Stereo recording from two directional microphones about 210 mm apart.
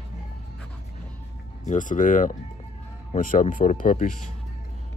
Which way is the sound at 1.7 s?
40° left (ahead or behind).